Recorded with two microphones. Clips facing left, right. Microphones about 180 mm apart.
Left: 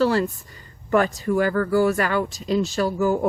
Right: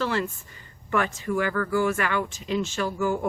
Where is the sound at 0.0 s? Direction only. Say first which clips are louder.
Left 7 dB; 35° left (ahead or behind).